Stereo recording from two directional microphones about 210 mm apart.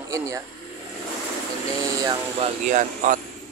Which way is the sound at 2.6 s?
40° right (ahead or behind).